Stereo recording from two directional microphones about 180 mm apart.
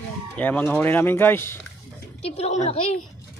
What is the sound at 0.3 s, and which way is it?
Speech, 10° left (ahead or behind).